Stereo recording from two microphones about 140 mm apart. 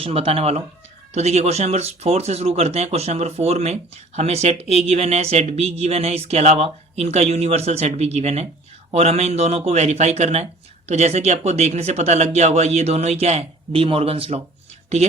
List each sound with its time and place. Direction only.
0.0 s speech: 40° right (ahead or behind)